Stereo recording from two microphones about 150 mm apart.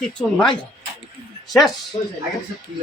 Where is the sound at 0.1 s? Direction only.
5° left (ahead or behind).